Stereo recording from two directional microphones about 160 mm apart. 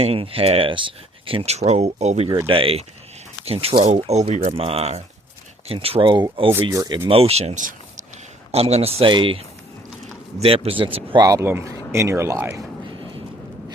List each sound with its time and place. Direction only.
0.0 s speech: 35° right (ahead or behind)
7.1 s speech: 40° right (ahead or behind)
8.5 s speech: 40° right (ahead or behind); by 12.6 s 15° right (ahead or behind)
12.9 s thunder: 30° right (ahead or behind)